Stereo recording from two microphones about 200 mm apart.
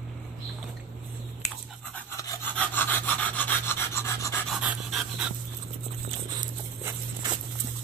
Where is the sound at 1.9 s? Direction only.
10° left (ahead or behind).